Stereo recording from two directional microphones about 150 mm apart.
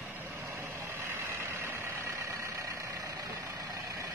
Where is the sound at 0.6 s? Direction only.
15° right (ahead or behind).